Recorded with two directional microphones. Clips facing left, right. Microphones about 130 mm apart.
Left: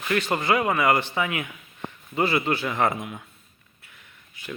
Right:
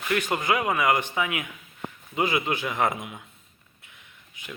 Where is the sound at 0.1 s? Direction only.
15° right (ahead or behind).